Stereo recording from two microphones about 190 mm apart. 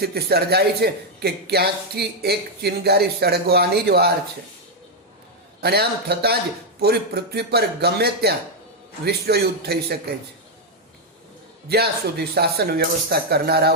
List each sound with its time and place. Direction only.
0.0 s a man's voice: 55° right (ahead or behind)
5.5 s a man's voice: 55° right (ahead or behind)
11.7 s a man's voice: 55° right (ahead or behind)